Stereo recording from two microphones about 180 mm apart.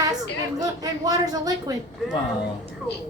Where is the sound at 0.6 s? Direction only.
20° right (ahead or behind).